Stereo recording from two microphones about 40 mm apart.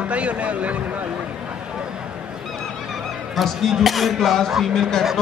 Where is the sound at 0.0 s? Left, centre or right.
Right.